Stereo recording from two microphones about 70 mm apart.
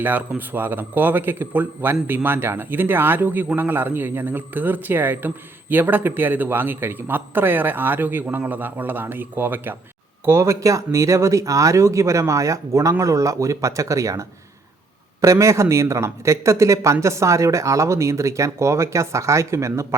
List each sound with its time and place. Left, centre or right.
0.0 s a man's voice: right
10.2 s speech: right